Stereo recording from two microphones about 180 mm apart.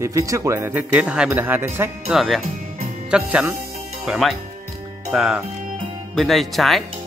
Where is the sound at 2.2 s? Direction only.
Centre (ahead or behind).